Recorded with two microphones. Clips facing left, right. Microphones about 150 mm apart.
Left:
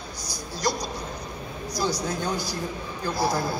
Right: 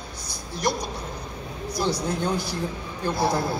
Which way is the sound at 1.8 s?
55° right (ahead or behind).